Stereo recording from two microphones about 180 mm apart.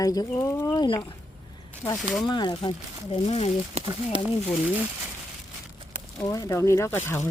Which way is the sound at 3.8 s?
35° right (ahead or behind).